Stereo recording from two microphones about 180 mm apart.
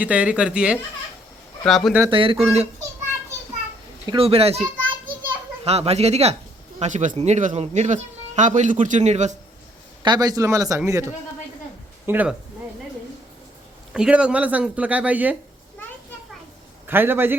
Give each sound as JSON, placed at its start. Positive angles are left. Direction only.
{"t": 0.0, "sound": "speech", "side_deg": -5}
{"t": 2.0, "sound": "speech", "side_deg": -30}
{"t": 4.1, "sound": "a child's voice", "side_deg": -30}
{"t": 10.0, "sound": "speech", "side_deg": -25}
{"t": 13.9, "sound": "speech", "side_deg": -5}
{"t": 16.8, "sound": "speech", "side_deg": -10}